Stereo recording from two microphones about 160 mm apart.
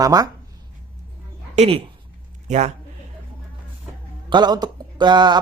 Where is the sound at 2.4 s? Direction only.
50° right (ahead or behind).